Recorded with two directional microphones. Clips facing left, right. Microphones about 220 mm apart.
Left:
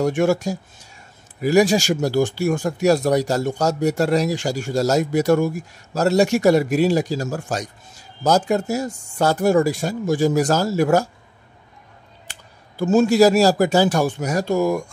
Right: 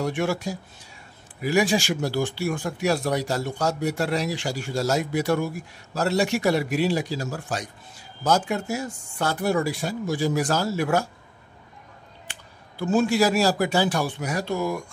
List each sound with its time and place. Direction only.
0.0 s speech: 45° left (ahead or behind)
12.3 s speech: 45° left (ahead or behind)